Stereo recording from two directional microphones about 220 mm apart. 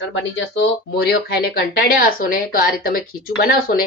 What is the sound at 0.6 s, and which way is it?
A woman's voice, 50° left (ahead or behind).